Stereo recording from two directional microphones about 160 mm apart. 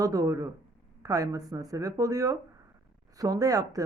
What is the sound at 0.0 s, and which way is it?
A woman's voice, 20° right (ahead or behind).